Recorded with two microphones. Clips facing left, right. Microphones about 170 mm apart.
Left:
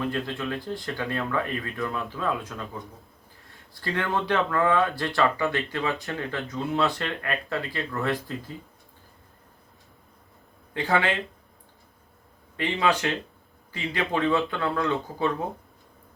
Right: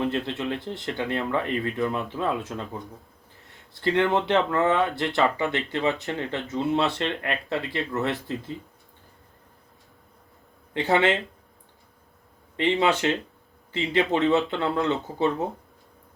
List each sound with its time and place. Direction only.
0.0 s speech: 25° right (ahead or behind)
3.8 s speech: 25° right (ahead or behind)
10.8 s speech: 25° right (ahead or behind)
12.5 s speech: 25° right (ahead or behind)